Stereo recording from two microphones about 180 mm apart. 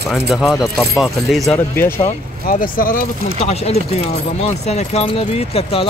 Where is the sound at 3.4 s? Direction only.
35° left (ahead or behind).